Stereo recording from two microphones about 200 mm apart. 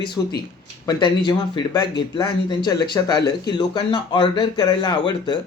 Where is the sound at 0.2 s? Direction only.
15° left (ahead or behind).